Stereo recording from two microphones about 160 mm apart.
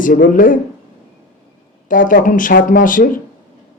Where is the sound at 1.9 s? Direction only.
60° left (ahead or behind).